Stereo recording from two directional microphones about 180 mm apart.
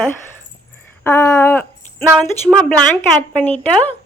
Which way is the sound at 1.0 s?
15° left (ahead or behind).